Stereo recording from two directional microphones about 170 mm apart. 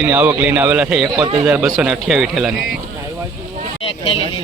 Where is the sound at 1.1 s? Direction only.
25° right (ahead or behind).